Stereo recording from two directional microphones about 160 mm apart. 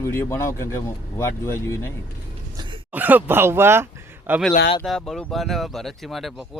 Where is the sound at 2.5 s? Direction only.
30° right (ahead or behind).